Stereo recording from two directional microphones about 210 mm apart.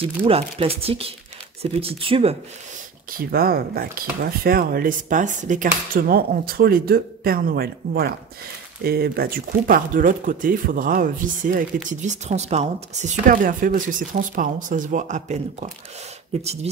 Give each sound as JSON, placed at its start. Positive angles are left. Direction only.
{"t": 0.0, "sound": "speech", "side_deg": -25}
{"t": 3.2, "sound": "speech", "side_deg": -45}